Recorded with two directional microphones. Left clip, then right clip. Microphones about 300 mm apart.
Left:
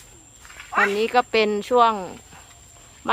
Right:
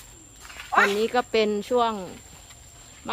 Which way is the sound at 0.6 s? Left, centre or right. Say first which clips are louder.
Even; right.